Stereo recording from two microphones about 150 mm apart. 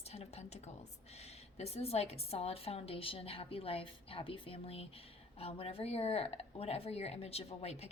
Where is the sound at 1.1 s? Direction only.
45° left (ahead or behind).